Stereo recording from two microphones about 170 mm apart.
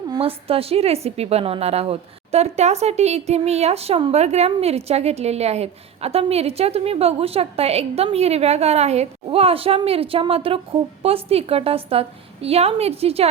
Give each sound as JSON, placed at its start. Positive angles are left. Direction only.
{"t": 0.2, "sound": "a woman's voice", "side_deg": -35}